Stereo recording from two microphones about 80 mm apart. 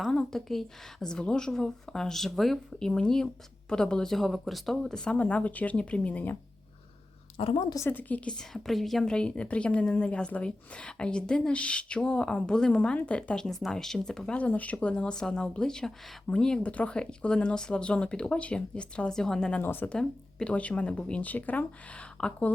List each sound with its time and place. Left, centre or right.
0.3 s a woman's voice: centre
7.3 s a woman's voice: left
7.9 s a woman's voice: left
19.6 s speech: left
19.9 s a woman's voice: centre